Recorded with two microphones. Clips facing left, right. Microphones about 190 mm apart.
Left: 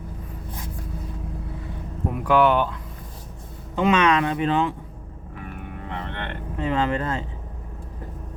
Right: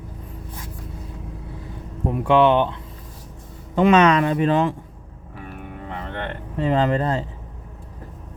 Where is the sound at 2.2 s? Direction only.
25° right (ahead or behind).